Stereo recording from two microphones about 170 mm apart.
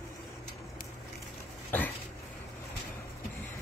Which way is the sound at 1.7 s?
10° left (ahead or behind).